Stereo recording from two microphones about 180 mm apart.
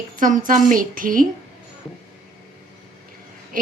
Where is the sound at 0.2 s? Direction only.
45° right (ahead or behind).